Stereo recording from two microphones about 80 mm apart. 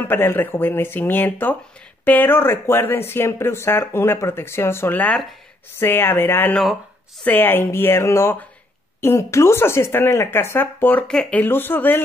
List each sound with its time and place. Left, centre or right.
0.0 s speech: left
11.1 s speech: centre
11.4 s speech: left